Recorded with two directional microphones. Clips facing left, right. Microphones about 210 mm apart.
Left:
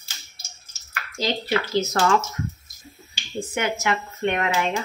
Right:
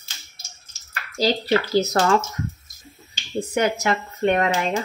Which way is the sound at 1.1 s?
35° right (ahead or behind).